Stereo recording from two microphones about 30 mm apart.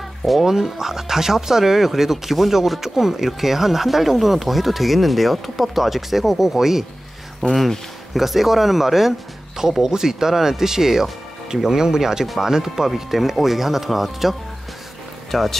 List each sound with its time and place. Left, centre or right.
0.2 s speech: centre
0.7 s speech: centre
8.1 s speech: centre
15.3 s speech: centre